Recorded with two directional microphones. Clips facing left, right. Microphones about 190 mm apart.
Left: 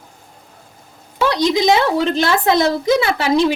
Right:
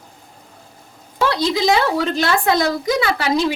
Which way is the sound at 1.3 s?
20° left (ahead or behind).